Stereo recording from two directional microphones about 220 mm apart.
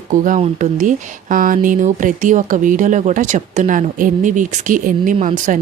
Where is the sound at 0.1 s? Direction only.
35° right (ahead or behind).